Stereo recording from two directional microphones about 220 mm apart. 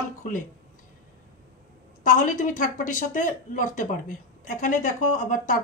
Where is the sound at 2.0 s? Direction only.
35° left (ahead or behind).